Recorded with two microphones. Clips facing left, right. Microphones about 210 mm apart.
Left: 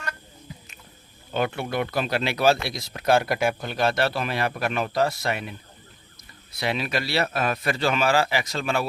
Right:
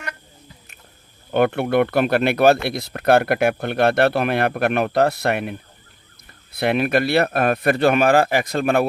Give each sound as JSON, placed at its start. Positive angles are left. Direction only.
{"t": 1.3, "sound": "speech", "side_deg": -60}